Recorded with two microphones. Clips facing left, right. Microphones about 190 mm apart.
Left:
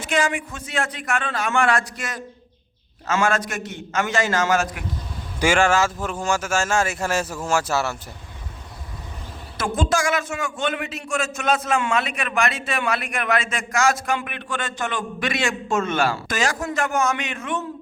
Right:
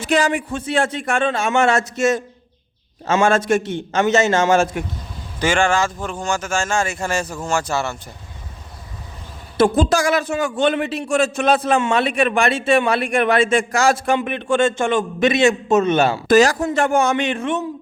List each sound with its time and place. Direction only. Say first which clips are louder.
0.0 s a man's voice: right 5 dB; 35° right (ahead or behind)
5.4 s speech: right 1 dB; 5° left (ahead or behind)
9.6 s a man's voice: right 7 dB; 35° right (ahead or behind)
16.3 s a man's voice: right 10 dB; 35° right (ahead or behind)